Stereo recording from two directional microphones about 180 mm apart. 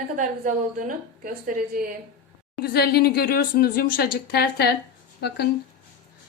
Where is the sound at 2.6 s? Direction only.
60° left (ahead or behind).